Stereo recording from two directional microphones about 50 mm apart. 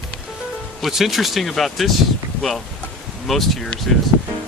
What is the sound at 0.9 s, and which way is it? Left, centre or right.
Speech, centre.